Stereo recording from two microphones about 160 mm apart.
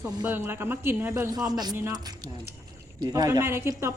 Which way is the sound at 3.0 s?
20° right (ahead or behind).